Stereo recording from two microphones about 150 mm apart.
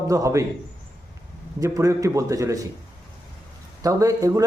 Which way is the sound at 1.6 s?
20° right (ahead or behind).